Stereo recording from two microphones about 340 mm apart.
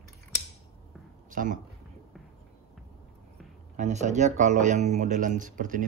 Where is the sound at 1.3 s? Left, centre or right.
Right.